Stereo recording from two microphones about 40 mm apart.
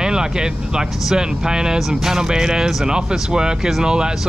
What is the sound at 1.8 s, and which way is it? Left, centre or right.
Speech, centre.